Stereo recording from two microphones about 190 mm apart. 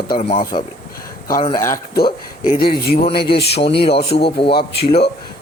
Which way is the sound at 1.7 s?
50° left (ahead or behind).